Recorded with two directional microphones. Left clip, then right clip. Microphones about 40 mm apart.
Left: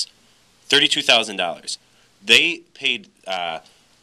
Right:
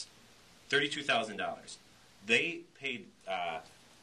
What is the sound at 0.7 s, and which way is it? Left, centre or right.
A man's voice, left.